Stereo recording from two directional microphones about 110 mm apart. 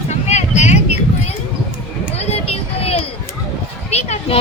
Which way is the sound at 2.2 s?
70° left (ahead or behind).